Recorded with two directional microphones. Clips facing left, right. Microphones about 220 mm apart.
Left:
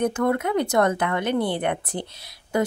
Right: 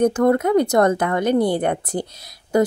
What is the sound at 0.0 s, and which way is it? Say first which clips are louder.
A woman's voice: right 6 dB; 40° right (ahead or behind).